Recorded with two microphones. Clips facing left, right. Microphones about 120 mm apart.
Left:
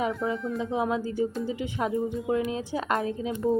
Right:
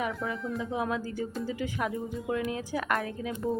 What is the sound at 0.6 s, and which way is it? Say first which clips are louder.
Speech: left 4 dB; 20° left (ahead or behind).